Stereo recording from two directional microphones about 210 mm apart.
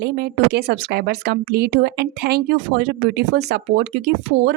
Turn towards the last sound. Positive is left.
turn(degrees=-50)  # may be behind; listen again after turning